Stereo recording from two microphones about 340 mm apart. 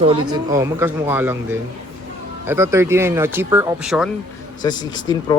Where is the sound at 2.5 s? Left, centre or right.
Centre.